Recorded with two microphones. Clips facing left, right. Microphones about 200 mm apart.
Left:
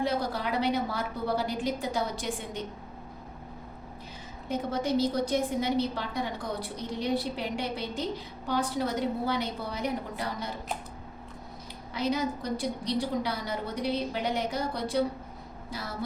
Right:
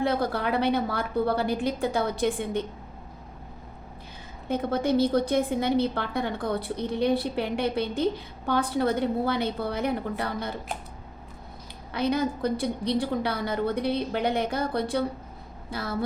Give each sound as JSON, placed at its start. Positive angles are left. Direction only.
{"t": 0.0, "sound": "a woman's voice", "side_deg": -55}
{"t": 4.4, "sound": "a woman's voice", "side_deg": -55}
{"t": 11.9, "sound": "a woman's voice", "side_deg": -60}